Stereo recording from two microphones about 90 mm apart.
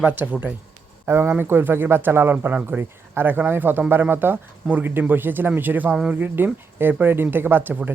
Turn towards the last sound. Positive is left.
turn(degrees=-20)  # may be behind; listen again after turning